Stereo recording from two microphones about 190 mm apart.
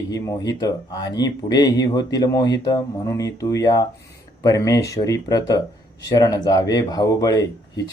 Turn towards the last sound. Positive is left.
turn(degrees=20)  # may be behind; listen again after turning